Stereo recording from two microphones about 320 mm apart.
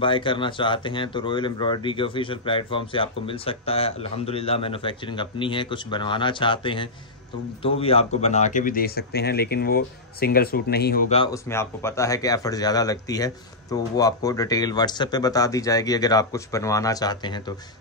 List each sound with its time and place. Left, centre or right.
0.0 s speech: centre
11.3 s speech: centre